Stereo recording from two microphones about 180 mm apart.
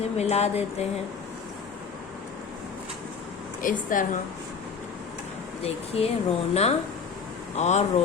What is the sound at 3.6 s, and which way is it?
Speech, 45° left (ahead or behind).